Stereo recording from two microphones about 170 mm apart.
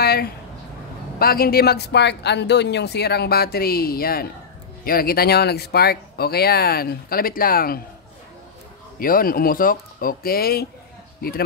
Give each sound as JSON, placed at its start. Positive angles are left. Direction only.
{"t": 0.0, "sound": "a sound", "side_deg": 65}
{"t": 1.2, "sound": "speech", "side_deg": 60}
{"t": 9.0, "sound": "speech", "side_deg": 60}